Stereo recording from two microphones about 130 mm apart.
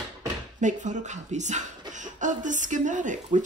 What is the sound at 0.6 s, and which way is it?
Speech, 70° right (ahead or behind).